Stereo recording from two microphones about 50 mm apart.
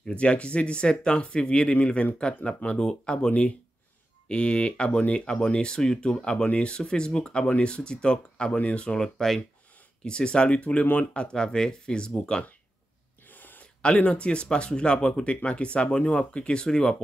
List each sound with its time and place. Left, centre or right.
0.0 s speech: left
3.3 s speech: left
6.2 s speech: left
9.0 s speech: centre
10.0 s speech: centre
13.2 s gasp: left
13.8 s speech: left